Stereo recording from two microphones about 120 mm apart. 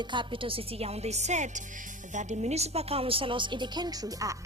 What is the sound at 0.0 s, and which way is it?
A woman's voice, 40° right (ahead or behind).